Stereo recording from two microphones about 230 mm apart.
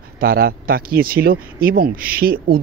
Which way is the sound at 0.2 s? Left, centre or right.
Right.